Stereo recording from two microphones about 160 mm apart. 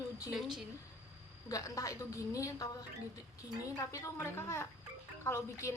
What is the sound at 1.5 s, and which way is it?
A woman's voice, 20° left (ahead or behind).